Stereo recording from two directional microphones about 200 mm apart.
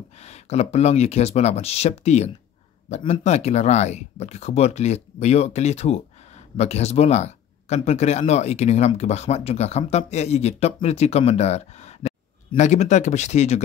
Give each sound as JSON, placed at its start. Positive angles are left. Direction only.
{"t": 0.2, "sound": "speech", "side_deg": 35}